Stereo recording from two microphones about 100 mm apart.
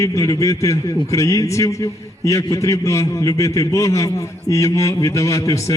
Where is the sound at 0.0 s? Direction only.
30° left (ahead or behind).